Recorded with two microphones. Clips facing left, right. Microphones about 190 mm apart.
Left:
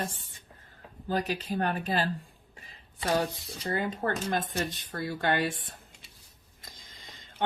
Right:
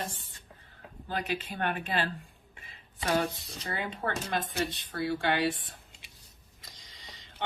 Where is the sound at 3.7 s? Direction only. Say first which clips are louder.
Left 4 dB; 45° left (ahead or behind).